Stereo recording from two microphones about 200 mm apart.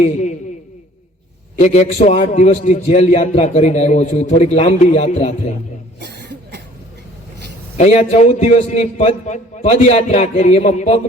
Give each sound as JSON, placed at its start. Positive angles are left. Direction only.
{"t": 0.0, "sound": "a man's voice", "side_deg": 35}
{"t": 1.5, "sound": "a man's voice", "side_deg": 35}
{"t": 6.0, "sound": "cough", "side_deg": -60}
{"t": 7.8, "sound": "a man's voice", "side_deg": 35}